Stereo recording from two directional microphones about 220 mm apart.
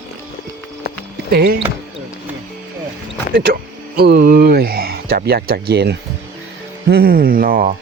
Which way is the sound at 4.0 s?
45° right (ahead or behind).